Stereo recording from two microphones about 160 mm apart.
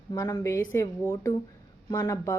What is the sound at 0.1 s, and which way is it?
Speech, 20° left (ahead or behind).